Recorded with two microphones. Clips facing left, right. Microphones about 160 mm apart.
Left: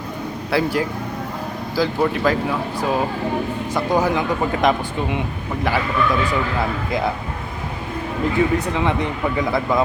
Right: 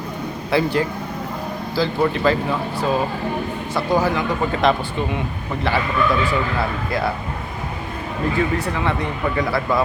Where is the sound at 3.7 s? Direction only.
20° left (ahead or behind).